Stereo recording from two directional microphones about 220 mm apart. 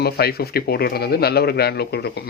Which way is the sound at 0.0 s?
45° left (ahead or behind).